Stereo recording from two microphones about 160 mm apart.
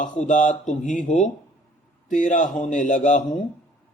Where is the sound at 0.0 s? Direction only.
50° left (ahead or behind).